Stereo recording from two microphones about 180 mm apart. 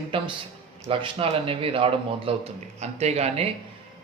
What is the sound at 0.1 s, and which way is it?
A man's voice, 30° right (ahead or behind).